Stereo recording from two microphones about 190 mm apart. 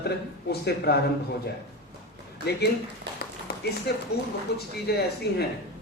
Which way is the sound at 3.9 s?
60° left (ahead or behind).